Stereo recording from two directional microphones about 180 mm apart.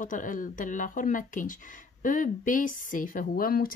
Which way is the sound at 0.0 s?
45° left (ahead or behind).